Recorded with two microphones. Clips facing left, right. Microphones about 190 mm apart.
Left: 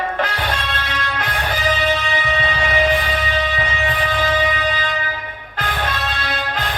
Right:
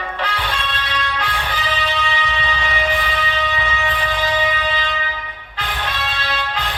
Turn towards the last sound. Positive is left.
turn(degrees=45)  # may be behind; listen again after turning